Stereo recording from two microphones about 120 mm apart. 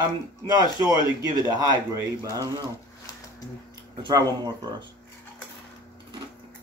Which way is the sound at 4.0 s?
35° right (ahead or behind).